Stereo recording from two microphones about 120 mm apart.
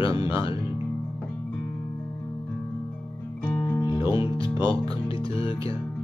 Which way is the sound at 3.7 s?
40° left (ahead or behind).